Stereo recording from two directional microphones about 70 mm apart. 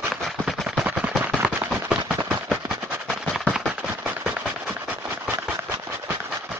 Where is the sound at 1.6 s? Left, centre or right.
Centre.